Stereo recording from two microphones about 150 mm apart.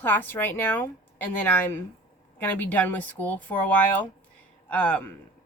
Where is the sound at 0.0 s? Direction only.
10° left (ahead or behind).